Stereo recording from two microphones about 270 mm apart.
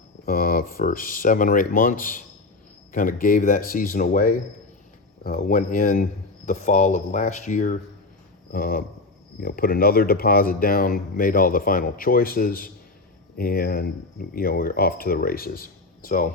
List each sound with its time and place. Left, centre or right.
0.3 s speech: left